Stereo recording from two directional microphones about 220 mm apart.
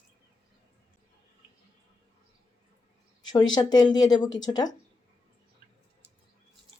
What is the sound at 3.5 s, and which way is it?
Speech, 20° left (ahead or behind).